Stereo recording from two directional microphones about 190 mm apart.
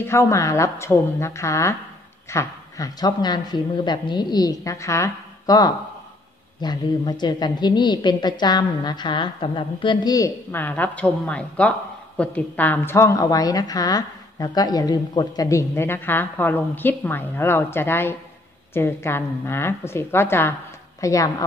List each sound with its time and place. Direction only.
0.0 s a woman's voice: 15° left (ahead or behind)